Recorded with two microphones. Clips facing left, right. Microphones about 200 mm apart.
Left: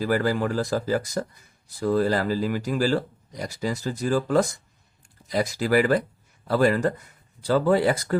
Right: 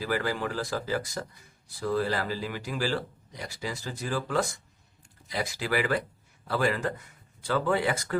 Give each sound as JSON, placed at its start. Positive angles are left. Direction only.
{"t": 0.0, "sound": "speech", "side_deg": 45}